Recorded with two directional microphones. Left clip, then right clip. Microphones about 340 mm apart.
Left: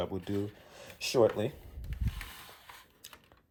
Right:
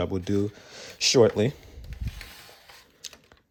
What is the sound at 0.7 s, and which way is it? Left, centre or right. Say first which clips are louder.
Speech: right 13 dB; right.